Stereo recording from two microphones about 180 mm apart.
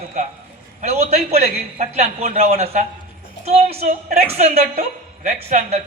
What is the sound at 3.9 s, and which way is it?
A woman's voice, 45° right (ahead or behind).